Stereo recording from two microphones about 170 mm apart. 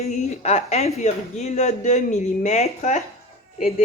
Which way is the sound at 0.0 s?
40° left (ahead or behind).